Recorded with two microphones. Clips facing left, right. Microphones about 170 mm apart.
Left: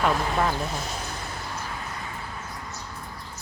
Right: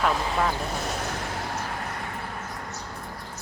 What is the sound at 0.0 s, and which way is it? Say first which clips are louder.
Speech: left 1 dB; centre (ahead or behind).